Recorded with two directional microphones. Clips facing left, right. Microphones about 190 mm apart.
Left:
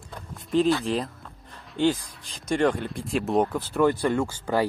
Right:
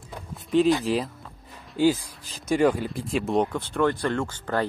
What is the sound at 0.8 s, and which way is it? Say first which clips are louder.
Speech: right 2 dB; 5° right (ahead or behind).